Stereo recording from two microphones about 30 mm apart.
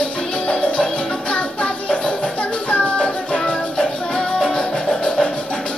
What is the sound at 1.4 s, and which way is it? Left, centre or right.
Music, left.